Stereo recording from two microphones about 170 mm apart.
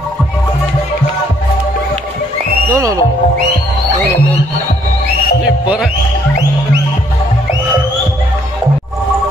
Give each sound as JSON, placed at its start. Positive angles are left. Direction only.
{"t": 2.7, "sound": "speech", "side_deg": -20}
{"t": 5.4, "sound": "music", "side_deg": -5}